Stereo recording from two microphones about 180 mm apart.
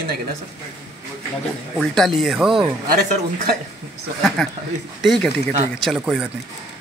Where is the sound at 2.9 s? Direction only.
55° right (ahead or behind).